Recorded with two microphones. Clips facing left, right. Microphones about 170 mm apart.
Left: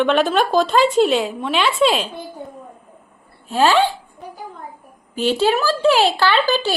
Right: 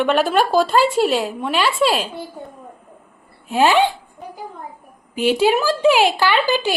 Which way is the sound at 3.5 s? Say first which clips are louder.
Even; 15° right (ahead or behind).